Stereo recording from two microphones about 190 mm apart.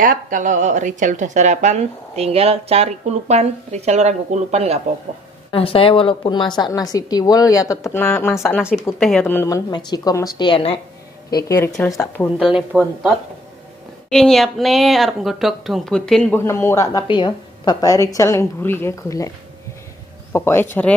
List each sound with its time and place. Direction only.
0.0 s a woman's voice: 45° right (ahead or behind)
5.5 s a woman's voice: 30° left (ahead or behind)
11.2 s speech: 20° left (ahead or behind)
12.4 s speech: 5° right (ahead or behind)
14.1 s speech: centre (ahead or behind)
20.3 s speech: 10° left (ahead or behind)